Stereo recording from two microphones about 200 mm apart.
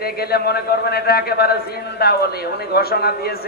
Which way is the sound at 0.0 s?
50° left (ahead or behind).